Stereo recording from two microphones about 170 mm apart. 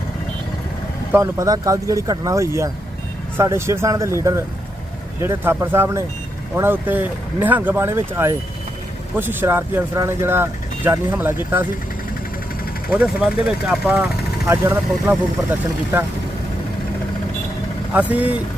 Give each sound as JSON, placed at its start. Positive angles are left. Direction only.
{"t": 1.1, "sound": "speech", "side_deg": -15}
{"t": 12.9, "sound": "speech", "side_deg": -5}
{"t": 17.9, "sound": "speech", "side_deg": -10}